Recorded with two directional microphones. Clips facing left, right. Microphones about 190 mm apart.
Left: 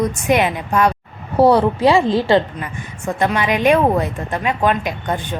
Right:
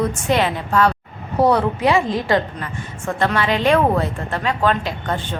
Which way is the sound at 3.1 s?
15° left (ahead or behind).